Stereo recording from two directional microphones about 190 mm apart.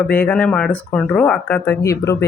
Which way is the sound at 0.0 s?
10° left (ahead or behind).